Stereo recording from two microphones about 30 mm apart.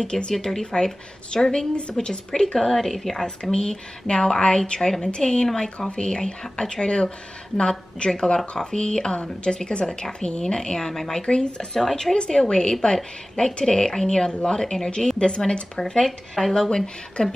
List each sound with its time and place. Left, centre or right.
0.0 s a woman's voice: left
2.0 s speech: centre
3.5 s a woman's voice: left
11.2 s a woman's voice: left
11.8 s speech: centre
12.2 s a woman's voice: left
16.0 s speech: centre
16.7 s a woman's voice: left